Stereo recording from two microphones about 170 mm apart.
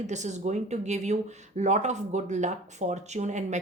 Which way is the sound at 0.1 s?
45° right (ahead or behind).